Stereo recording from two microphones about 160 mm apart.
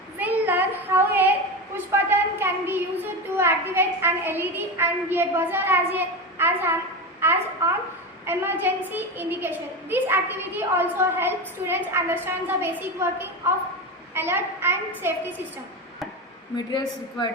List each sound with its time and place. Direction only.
0.2 s a sound: 10° right (ahead or behind)
8.3 s a woman's voice: 15° right (ahead or behind)
16.6 s a man's voice: 25° left (ahead or behind)